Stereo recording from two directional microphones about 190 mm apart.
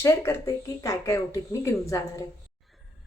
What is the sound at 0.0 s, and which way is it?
Speech, 15° left (ahead or behind).